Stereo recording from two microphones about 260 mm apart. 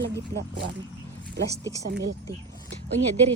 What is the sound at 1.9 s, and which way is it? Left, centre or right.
Speech, right.